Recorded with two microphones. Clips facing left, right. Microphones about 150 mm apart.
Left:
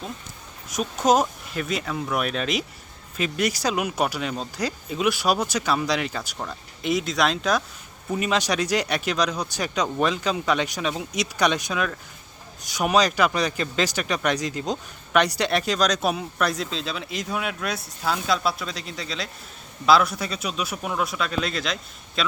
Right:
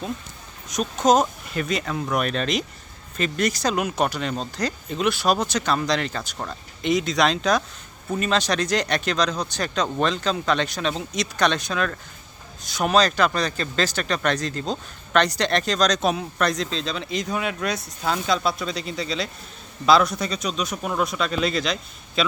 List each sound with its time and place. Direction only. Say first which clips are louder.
0.7 s speech: right 2 dB; 5° left (ahead or behind)